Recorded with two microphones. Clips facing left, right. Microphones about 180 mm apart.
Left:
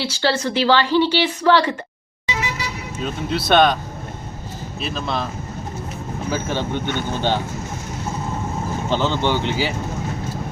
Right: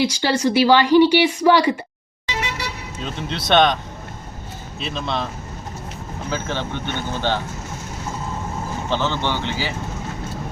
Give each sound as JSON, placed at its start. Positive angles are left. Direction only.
{"t": 0.0, "sound": "speech", "side_deg": -15}
{"t": 3.0, "sound": "speech", "side_deg": 5}
{"t": 4.8, "sound": "speech", "side_deg": 5}
{"t": 6.3, "sound": "speech", "side_deg": 15}
{"t": 8.9, "sound": "speech", "side_deg": 15}